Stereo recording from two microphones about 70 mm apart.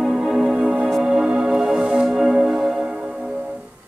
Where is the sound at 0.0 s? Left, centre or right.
Centre.